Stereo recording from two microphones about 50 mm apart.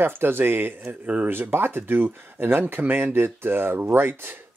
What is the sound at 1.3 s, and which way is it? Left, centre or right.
Speech, right.